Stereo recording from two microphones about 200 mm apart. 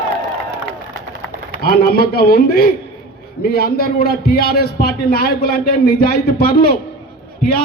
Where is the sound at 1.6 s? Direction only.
50° left (ahead or behind).